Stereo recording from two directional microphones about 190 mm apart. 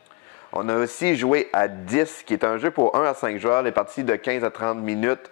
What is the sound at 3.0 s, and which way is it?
Speech, 15° left (ahead or behind).